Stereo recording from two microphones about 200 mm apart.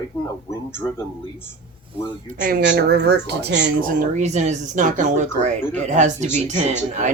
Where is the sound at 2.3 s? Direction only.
45° right (ahead or behind).